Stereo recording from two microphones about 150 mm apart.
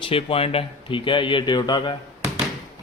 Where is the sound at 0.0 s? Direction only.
40° left (ahead or behind).